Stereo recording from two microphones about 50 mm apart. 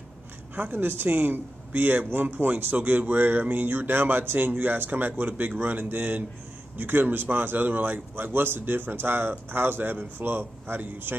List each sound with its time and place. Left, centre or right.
0.6 s a man's voice: right